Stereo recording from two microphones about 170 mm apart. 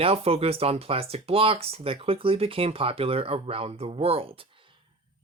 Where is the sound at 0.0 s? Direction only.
35° right (ahead or behind).